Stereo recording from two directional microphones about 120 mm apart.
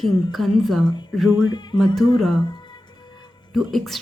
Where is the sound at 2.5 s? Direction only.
40° left (ahead or behind).